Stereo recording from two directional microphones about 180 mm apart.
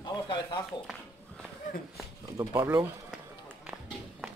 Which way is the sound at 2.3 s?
15° right (ahead or behind).